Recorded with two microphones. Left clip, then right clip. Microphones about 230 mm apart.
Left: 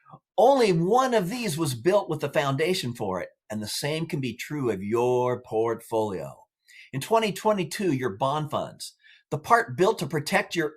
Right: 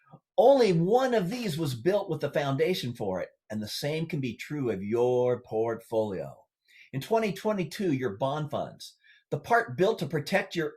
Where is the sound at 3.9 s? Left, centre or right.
Left.